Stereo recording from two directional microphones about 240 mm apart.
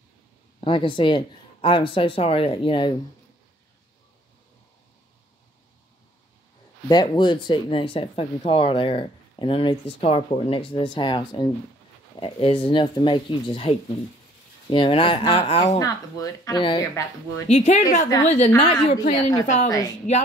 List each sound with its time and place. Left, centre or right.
0.6 s speech: left
6.9 s speech: centre
17.5 s speech: left